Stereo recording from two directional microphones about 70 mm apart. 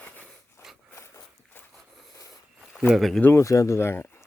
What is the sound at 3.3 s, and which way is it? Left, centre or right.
Speech, left.